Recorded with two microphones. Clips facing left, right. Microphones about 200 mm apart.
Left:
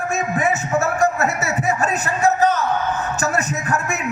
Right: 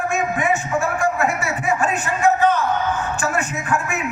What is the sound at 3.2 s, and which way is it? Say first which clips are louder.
Music: left 1 dB; 40° left (ahead or behind).